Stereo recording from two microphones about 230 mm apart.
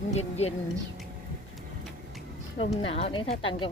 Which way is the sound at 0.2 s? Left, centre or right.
Left.